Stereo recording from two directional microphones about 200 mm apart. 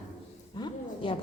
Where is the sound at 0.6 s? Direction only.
25° left (ahead or behind).